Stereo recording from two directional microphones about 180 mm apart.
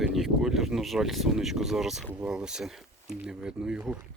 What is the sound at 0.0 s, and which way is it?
Speech, centre (ahead or behind).